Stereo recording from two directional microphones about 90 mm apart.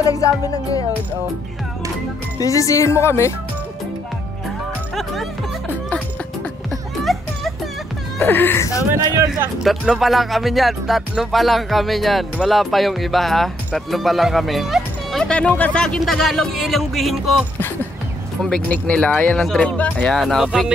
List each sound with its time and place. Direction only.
0.0 s music: 40° left (ahead or behind)
2.3 s speech: 40° left (ahead or behind)
7.1 s music: centre (ahead or behind)
8.2 s speech: 20° left (ahead or behind)
9.6 s music: centre (ahead or behind)
13.7 s speech: centre (ahead or behind)
15.2 s music: 10° left (ahead or behind)
18.4 s speech: 10° left (ahead or behind)
19.3 s speech: 5° left (ahead or behind)
20.2 s music: centre (ahead or behind)